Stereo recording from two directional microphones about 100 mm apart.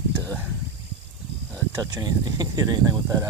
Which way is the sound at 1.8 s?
40° right (ahead or behind).